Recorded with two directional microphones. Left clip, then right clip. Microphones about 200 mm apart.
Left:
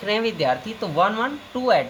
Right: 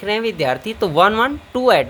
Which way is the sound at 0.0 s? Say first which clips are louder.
Right 3 dB; 30° right (ahead or behind).